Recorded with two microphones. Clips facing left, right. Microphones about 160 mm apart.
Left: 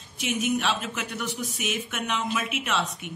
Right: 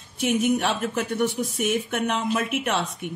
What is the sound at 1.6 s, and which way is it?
Speech, 55° right (ahead or behind).